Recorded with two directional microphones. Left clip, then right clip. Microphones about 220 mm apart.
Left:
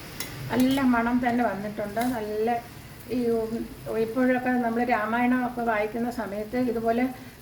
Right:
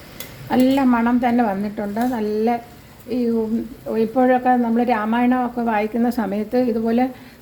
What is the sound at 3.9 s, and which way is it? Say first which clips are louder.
Speech: right 8 dB; 35° right (ahead or behind).